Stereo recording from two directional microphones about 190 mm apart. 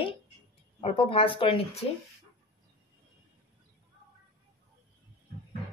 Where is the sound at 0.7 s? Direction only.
30° left (ahead or behind).